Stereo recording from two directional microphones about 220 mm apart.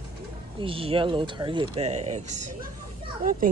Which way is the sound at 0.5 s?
25° right (ahead or behind).